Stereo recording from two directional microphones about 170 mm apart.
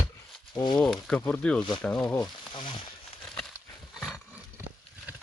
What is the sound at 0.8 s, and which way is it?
Speech, 5° left (ahead or behind).